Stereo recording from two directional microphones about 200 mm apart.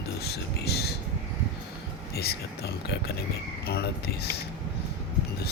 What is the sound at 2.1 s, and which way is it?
Speech, 50° left (ahead or behind).